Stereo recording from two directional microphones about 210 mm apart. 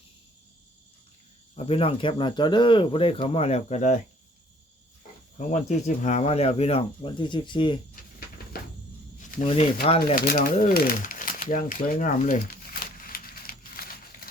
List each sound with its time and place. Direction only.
1.5 s speech: 25° left (ahead or behind)
5.4 s speech: 35° left (ahead or behind)
8.4 s a sound: 45° left (ahead or behind)
9.4 s speech: 30° left (ahead or behind)
10.2 s crumpling: 40° left (ahead or behind)